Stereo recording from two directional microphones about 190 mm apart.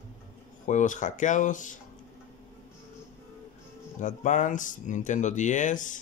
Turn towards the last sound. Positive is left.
turn(degrees=40)  # may be behind; listen again after turning